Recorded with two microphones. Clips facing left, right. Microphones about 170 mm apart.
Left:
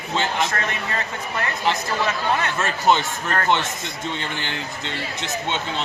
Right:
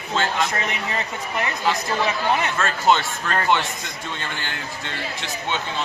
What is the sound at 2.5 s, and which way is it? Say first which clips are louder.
Speech: even; 15° left (ahead or behind).